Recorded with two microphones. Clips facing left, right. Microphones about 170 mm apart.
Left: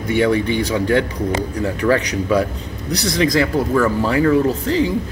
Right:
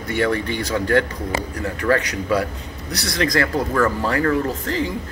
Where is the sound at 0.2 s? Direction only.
15° left (ahead or behind).